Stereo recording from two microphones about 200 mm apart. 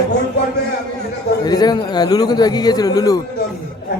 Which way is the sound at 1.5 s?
20° left (ahead or behind).